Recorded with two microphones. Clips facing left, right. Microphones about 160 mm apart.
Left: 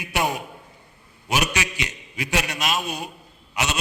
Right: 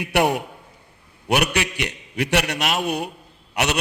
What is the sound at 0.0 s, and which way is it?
A man's voice, 65° right (ahead or behind).